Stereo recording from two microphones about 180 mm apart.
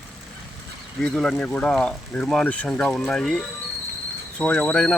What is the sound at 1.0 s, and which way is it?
Speech, 5° left (ahead or behind).